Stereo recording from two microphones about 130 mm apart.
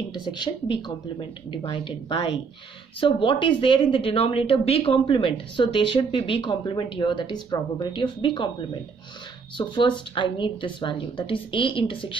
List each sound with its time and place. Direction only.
0.1 s a woman's voice: 35° left (ahead or behind)